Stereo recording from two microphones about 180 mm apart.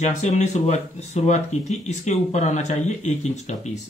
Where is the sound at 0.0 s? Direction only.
40° left (ahead or behind).